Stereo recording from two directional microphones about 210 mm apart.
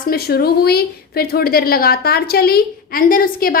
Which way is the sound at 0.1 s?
50° left (ahead or behind).